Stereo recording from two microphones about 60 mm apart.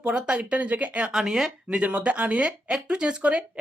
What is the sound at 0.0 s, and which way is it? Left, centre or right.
Speech, centre.